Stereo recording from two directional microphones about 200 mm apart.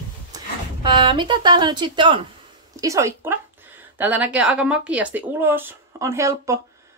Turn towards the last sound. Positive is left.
turn(degrees=-15)  # may be behind; listen again after turning